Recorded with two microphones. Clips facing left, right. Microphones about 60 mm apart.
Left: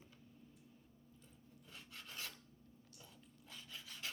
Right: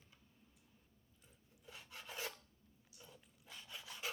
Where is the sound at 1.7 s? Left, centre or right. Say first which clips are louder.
Right 3 dB; centre.